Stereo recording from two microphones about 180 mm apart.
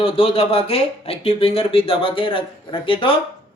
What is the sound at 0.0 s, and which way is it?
Speech, 30° left (ahead or behind).